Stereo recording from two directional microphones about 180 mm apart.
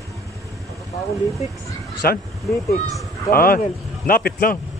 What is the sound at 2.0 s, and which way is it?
Speech, 55° left (ahead or behind).